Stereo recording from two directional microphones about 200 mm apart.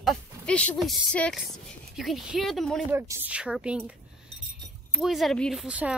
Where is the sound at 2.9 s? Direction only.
10° right (ahead or behind).